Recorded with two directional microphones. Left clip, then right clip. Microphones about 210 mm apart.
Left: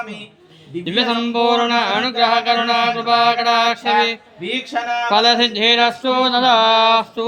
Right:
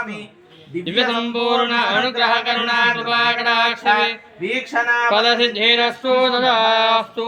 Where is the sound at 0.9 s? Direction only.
50° left (ahead or behind).